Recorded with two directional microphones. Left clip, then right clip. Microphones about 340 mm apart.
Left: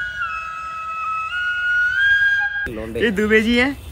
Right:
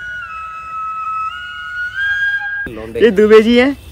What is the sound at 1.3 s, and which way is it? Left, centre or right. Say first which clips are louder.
Flute: left 6 dB; centre.